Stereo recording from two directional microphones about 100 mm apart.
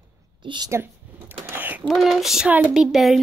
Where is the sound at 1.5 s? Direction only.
20° right (ahead or behind).